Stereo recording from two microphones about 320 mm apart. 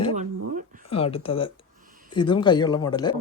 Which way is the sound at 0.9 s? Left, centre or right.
Centre.